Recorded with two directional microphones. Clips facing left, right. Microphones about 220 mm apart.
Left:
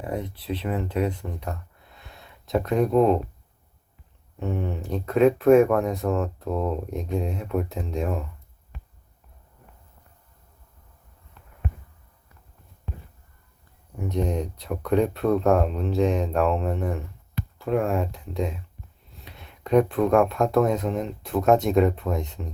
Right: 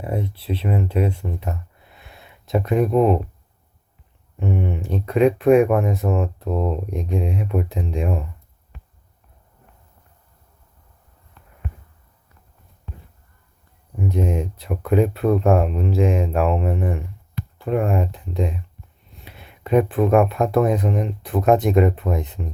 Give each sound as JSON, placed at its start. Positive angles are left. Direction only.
{"t": 0.4, "sound": "speech", "side_deg": -25}
{"t": 1.4, "sound": "a sound", "side_deg": -5}
{"t": 4.4, "sound": "speech", "side_deg": 0}
{"t": 5.5, "sound": "speech", "side_deg": -15}
{"t": 5.8, "sound": "speech", "side_deg": -5}
{"t": 6.1, "sound": "speech", "side_deg": -15}
{"t": 6.4, "sound": "speech", "side_deg": 0}
{"t": 14.1, "sound": "speech", "side_deg": -5}